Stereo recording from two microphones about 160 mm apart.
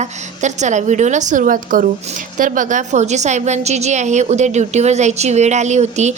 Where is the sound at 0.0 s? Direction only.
50° right (ahead or behind).